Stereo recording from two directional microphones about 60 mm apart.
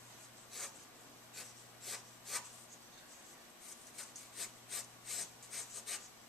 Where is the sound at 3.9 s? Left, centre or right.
Centre.